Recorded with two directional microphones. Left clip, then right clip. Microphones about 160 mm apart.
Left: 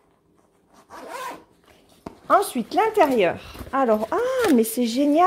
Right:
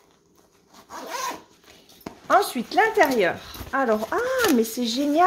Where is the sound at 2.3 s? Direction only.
35° left (ahead or behind).